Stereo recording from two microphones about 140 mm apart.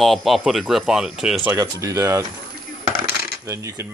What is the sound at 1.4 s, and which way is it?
Speech, 25° right (ahead or behind).